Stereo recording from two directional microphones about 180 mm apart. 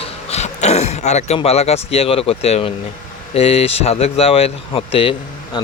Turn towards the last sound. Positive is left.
turn(degrees=30)  # may be behind; listen again after turning